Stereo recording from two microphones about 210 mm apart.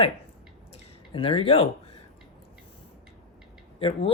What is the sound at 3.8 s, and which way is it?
Speech, 25° left (ahead or behind).